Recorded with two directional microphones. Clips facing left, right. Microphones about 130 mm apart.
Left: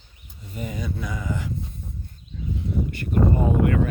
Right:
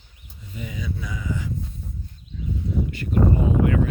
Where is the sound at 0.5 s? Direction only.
45° left (ahead or behind).